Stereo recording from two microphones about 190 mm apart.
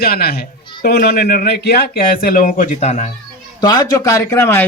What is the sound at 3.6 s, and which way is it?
Speech, 20° left (ahead or behind).